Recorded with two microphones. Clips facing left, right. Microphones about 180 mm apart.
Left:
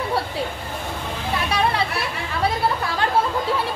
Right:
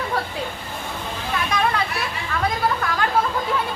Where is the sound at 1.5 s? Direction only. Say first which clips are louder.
Even; 30° left (ahead or behind).